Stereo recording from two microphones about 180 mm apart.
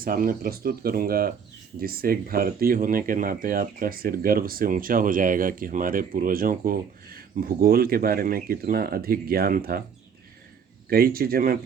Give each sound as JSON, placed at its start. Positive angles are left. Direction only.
{"t": 0.0, "sound": "speech", "side_deg": -50}
{"t": 10.8, "sound": "speech", "side_deg": -55}